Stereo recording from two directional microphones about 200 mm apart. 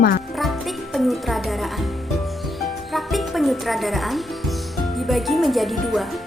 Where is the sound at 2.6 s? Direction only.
Centre (ahead or behind).